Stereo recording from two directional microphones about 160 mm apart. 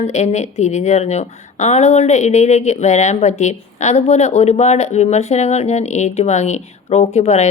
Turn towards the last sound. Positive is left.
turn(degrees=45)  # may be behind; listen again after turning